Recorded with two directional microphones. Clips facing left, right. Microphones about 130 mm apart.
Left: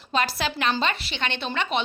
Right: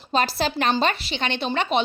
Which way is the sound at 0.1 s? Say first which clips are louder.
Right 3 dB; 35° right (ahead or behind).